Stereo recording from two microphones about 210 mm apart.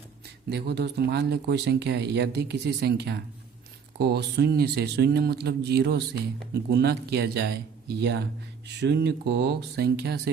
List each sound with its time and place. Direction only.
0.5 s speech: 50° right (ahead or behind)
8.6 s speech: 55° right (ahead or behind)